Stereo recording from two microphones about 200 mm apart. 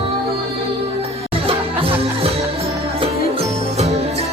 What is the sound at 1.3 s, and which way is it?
Music, 30° right (ahead or behind).